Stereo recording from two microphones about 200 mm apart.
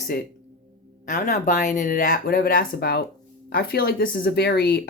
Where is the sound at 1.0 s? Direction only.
40° left (ahead or behind).